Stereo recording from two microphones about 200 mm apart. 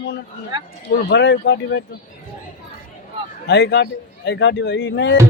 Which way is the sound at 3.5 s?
60° left (ahead or behind).